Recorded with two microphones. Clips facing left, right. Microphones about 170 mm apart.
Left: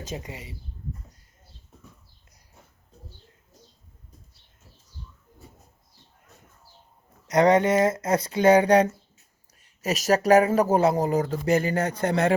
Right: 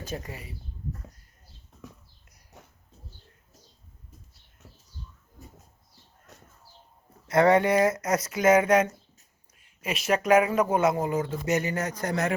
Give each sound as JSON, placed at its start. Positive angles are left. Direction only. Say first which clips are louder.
{"t": 0.1, "sound": "speech", "louder": "even", "side_deg": 20}
{"t": 2.5, "sound": "bird", "louder": "right 4 dB", "side_deg": -80}
{"t": 6.3, "sound": "bird", "louder": "right 3 dB", "side_deg": -80}
{"t": 7.3, "sound": "speech", "louder": "left 1 dB", "side_deg": 20}